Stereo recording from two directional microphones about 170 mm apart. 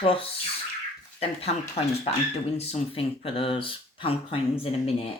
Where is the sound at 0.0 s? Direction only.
30° left (ahead or behind).